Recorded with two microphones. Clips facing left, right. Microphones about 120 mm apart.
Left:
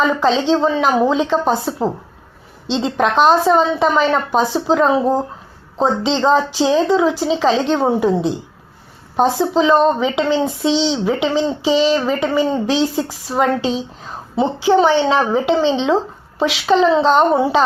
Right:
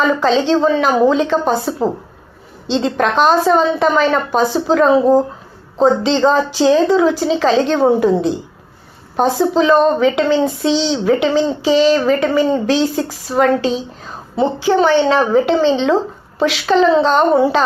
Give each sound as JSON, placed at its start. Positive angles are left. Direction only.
{"t": 0.2, "sound": "a woman's voice", "side_deg": 20}
{"t": 2.7, "sound": "a woman's voice", "side_deg": 15}